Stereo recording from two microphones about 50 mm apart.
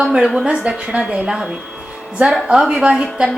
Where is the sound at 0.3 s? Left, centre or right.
Right.